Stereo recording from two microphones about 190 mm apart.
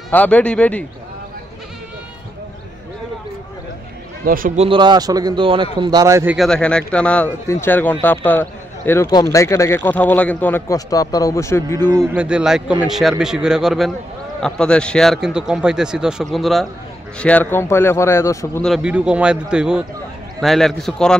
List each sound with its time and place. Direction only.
0.1 s a man's voice: 10° left (ahead or behind)
4.2 s a man's voice: 50° right (ahead or behind)
4.6 s a man's voice: 25° right (ahead or behind)
6.3 s a man's voice: centre (ahead or behind)
11.9 s a man's voice: 15° right (ahead or behind)
12.3 s a man's voice: 5° right (ahead or behind); by 18.6 s 15° left (ahead or behind)
18.6 s a man's voice: centre (ahead or behind)